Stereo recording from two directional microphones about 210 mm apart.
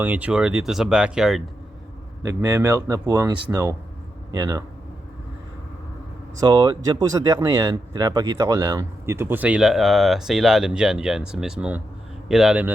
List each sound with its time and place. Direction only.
0.0 s speech: 5° right (ahead or behind)
2.2 s speech: 15° right (ahead or behind)
6.4 s speech: 20° right (ahead or behind)